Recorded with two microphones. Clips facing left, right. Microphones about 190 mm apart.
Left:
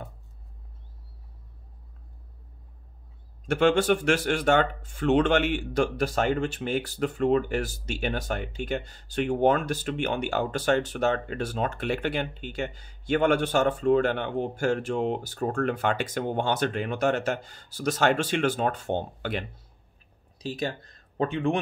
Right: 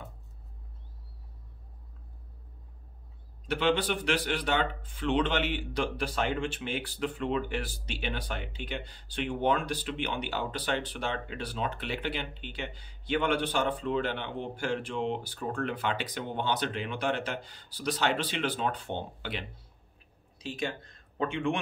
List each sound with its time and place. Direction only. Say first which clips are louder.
3.4 s speech: left 6 dB; 45° left (ahead or behind)